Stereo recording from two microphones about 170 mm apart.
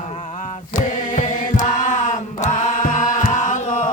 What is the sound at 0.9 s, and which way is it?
Chant, 50° left (ahead or behind).